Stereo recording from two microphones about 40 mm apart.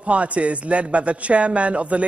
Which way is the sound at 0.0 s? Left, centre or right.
Right.